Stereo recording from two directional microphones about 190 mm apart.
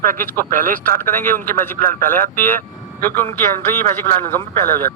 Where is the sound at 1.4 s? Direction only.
10° left (ahead or behind).